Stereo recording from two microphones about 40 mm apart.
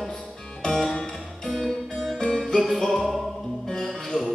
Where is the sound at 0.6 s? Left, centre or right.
Centre.